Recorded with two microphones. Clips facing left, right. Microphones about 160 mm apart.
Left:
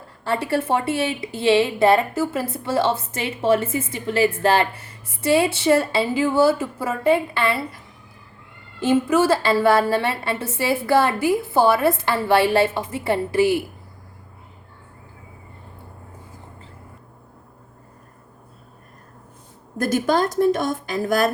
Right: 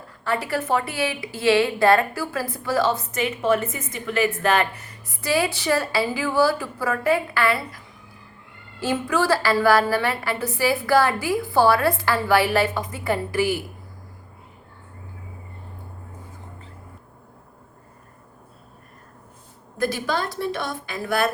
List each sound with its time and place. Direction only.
0.3 s a woman's voice: 30° left (ahead or behind)
8.8 s a woman's voice: 20° left (ahead or behind)
19.8 s a woman's voice: 45° left (ahead or behind)